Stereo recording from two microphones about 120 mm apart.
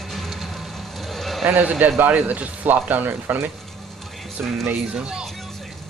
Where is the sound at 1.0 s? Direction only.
Centre (ahead or behind).